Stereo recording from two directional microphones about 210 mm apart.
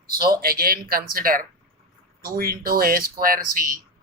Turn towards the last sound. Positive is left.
turn(degrees=-40)  # may be behind; listen again after turning